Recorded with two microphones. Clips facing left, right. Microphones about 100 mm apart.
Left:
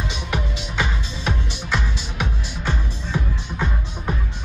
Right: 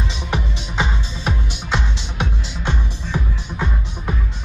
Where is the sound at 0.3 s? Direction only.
25° right (ahead or behind).